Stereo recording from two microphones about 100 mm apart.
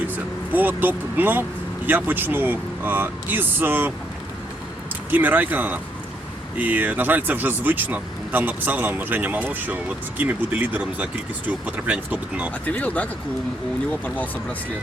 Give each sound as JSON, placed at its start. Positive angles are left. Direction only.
{"t": 0.5, "sound": "speech", "side_deg": -20}
{"t": 5.1, "sound": "speech", "side_deg": -20}
{"t": 12.6, "sound": "speech", "side_deg": 15}